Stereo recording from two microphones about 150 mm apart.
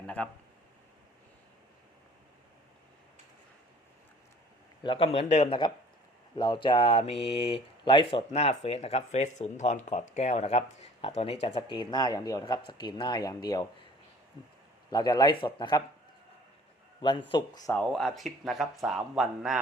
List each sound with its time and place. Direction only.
0.2 s speech: 5° left (ahead or behind)
4.8 s speech: 35° left (ahead or behind)
14.8 s speech: 25° left (ahead or behind)
17.0 s speech: 35° left (ahead or behind)
17.7 s speech: 5° left (ahead or behind)